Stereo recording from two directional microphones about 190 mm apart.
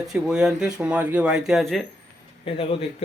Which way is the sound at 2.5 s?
30° left (ahead or behind).